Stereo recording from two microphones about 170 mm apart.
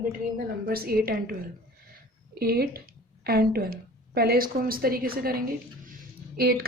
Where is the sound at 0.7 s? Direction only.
65° right (ahead or behind).